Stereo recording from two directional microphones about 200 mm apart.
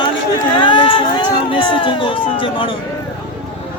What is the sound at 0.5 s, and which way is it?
A man's voice, 25° left (ahead or behind).